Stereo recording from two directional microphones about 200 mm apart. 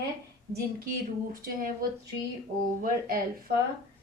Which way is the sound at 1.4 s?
45° right (ahead or behind).